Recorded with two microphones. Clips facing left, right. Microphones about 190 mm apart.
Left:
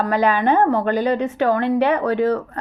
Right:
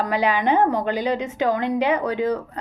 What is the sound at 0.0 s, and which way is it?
A woman's voice, 15° right (ahead or behind).